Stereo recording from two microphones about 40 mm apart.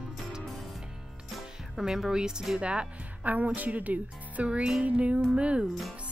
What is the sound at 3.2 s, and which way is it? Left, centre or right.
Speech, right.